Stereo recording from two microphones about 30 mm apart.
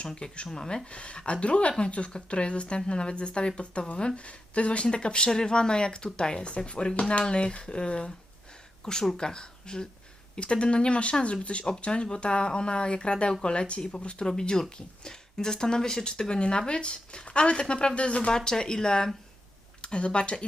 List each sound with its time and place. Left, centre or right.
0.4 s speech: left
0.9 s speech: left
8.8 s speech: left
14.3 s speech: left
18.3 s speech: left
19.8 s speech: left